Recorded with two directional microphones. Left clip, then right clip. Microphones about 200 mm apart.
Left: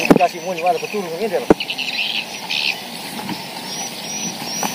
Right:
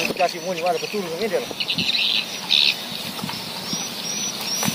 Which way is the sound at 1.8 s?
55° right (ahead or behind).